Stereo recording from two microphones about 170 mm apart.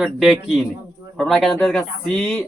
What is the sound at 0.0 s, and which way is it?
A man's voice, centre (ahead or behind).